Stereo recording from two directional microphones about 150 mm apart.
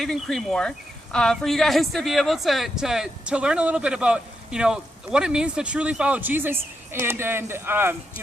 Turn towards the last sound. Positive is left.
turn(degrees=-15)  # may be behind; listen again after turning